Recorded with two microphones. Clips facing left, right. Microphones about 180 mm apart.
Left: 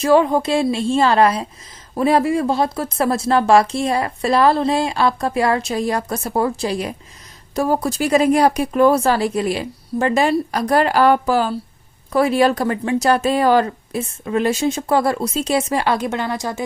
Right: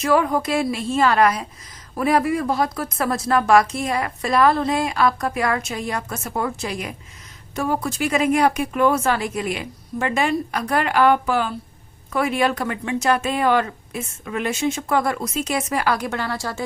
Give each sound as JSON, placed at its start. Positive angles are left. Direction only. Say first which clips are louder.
{"t": 0.0, "sound": "a woman's voice", "louder": "left 5 dB", "side_deg": 25}